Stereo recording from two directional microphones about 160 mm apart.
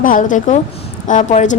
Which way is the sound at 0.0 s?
55° left (ahead or behind).